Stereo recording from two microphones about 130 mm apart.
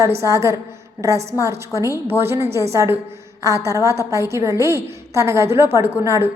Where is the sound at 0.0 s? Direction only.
25° right (ahead or behind).